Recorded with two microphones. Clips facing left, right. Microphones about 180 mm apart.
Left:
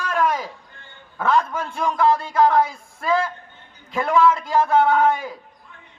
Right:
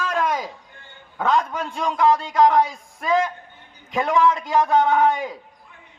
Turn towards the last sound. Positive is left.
turn(degrees=-20)  # may be behind; listen again after turning